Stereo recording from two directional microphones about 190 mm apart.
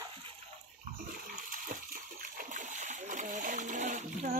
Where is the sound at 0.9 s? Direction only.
50° right (ahead or behind).